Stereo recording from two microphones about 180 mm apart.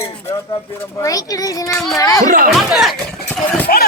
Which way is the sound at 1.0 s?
20° left (ahead or behind).